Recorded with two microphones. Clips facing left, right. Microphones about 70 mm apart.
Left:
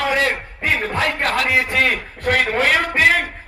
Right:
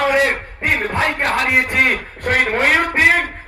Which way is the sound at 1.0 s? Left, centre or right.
Right.